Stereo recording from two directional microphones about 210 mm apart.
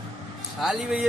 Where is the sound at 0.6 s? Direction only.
Centre (ahead or behind).